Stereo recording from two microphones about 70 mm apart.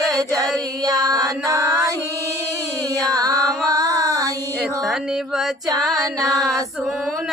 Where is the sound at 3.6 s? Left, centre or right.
Right.